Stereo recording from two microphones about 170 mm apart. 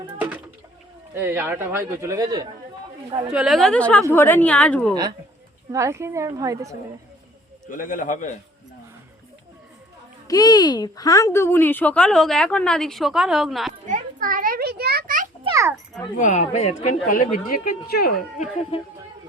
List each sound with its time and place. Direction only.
0.2 s bird: 10° right (ahead or behind)
1.1 s a man's voice: 10° right (ahead or behind)
3.2 s a woman's voice: 5° right (ahead or behind)
5.7 s a man's voice: 15° right (ahead or behind)
7.7 s speech: 50° left (ahead or behind)
10.2 s speech: 20° left (ahead or behind); by 13.7 s centre (ahead or behind)
13.8 s children playing: 50° right (ahead or behind)
15.4 s a sound: 20° right (ahead or behind)
16.1 s speech: 45° left (ahead or behind); by 18.1 s 65° left (ahead or behind)